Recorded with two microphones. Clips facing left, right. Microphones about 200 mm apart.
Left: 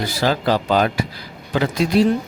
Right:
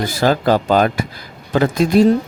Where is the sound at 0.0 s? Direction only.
50° right (ahead or behind).